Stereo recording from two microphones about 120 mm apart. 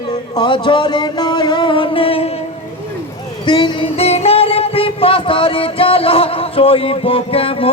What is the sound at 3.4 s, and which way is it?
Speech, 40° left (ahead or behind).